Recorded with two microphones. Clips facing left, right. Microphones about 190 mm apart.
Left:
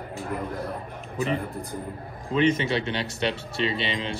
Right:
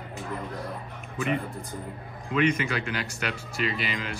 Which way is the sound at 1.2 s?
35° left (ahead or behind).